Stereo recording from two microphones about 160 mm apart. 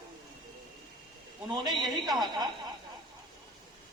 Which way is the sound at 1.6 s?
25° right (ahead or behind).